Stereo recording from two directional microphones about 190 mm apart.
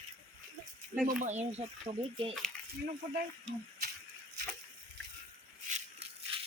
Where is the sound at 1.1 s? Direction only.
40° right (ahead or behind).